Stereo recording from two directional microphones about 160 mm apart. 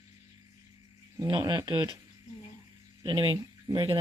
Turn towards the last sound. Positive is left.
turn(degrees=-30)  # may be behind; listen again after turning